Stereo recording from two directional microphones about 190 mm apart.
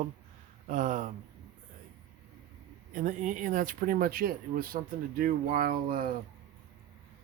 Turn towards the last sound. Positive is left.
turn(degrees=-50)  # may be behind; listen again after turning